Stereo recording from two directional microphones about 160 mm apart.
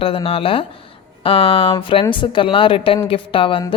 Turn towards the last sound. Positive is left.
turn(degrees=35)  # may be behind; listen again after turning